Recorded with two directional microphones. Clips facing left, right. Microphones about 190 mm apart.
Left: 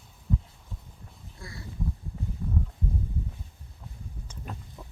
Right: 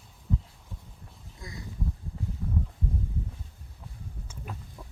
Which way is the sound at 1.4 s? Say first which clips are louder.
Right 1 dB; 20° right (ahead or behind).